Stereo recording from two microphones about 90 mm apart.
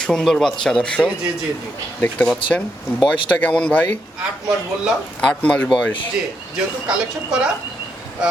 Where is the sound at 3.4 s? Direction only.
15° left (ahead or behind).